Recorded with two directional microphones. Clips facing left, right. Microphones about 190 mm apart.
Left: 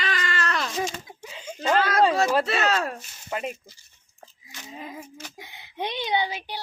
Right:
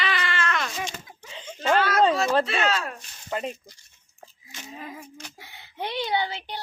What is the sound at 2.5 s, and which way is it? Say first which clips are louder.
Speech: left 2 dB; 40° left (ahead or behind).